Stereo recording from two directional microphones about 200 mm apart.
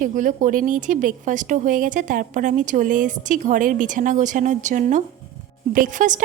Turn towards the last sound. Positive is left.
turn(degrees=-40)  # may be behind; listen again after turning